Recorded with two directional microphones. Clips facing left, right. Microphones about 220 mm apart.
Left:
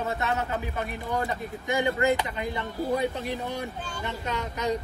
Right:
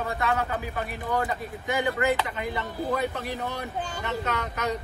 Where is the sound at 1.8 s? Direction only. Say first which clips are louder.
Left 1 dB; 20° left (ahead or behind).